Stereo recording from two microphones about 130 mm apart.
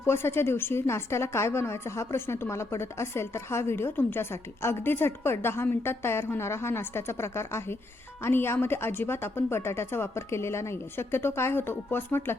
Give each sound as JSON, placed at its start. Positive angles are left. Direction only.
{"t": 0.0, "sound": "a woman's voice", "side_deg": 20}